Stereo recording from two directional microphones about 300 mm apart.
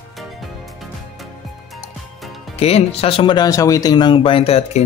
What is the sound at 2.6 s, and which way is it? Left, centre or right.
Speech, centre.